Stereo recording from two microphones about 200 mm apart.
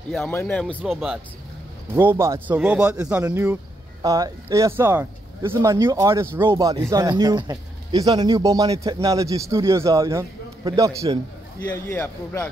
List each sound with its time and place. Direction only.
0.1 s speech: centre (ahead or behind)
2.0 s speech: 10° right (ahead or behind)
11.7 s a man's voice: 10° left (ahead or behind)